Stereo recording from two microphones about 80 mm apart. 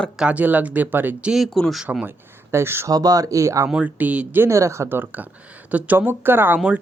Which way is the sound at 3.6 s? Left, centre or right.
Centre.